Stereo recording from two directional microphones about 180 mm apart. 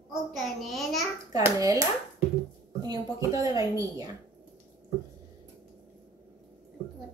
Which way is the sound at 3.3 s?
20° right (ahead or behind).